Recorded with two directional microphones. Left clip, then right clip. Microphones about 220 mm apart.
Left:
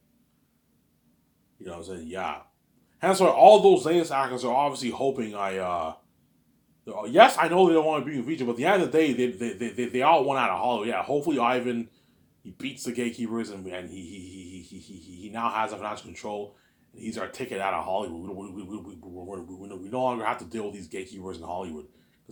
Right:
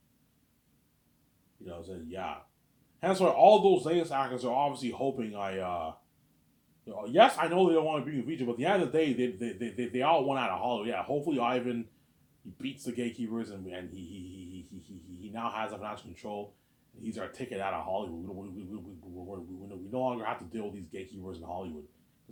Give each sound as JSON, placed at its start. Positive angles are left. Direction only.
{"t": 1.6, "sound": "a man's voice", "side_deg": 25}